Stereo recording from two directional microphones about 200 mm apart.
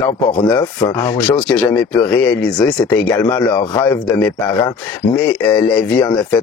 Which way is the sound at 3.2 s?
20° left (ahead or behind).